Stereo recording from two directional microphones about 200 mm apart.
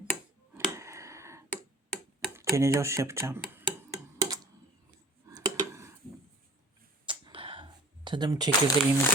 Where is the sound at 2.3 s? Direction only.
15° right (ahead or behind).